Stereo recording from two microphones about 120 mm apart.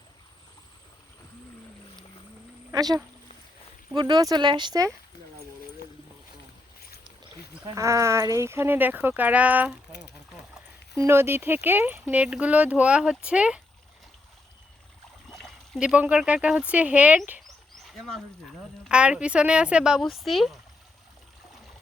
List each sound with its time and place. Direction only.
2.7 s speech: 35° right (ahead or behind)
7.6 s speech: 25° right (ahead or behind)
10.9 s speech: 20° right (ahead or behind)
15.3 s a sound: 5° left (ahead or behind)
15.8 s speech: 10° right (ahead or behind)
17.8 s speech: centre (ahead or behind)